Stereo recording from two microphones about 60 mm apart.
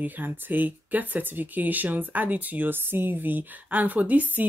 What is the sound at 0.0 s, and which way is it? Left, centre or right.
Speech, right.